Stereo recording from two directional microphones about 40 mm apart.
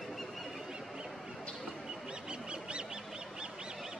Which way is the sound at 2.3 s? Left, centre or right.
Right.